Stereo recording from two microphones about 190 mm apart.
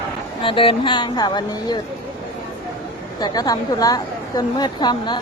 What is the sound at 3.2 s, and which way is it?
A woman's voice, 20° left (ahead or behind).